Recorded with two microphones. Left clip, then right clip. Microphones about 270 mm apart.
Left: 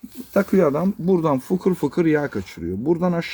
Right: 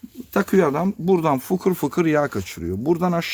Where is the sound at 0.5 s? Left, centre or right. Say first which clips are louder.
Right 2 dB; centre.